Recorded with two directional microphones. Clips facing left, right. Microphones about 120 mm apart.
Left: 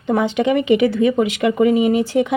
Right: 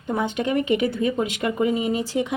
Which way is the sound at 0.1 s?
90° left.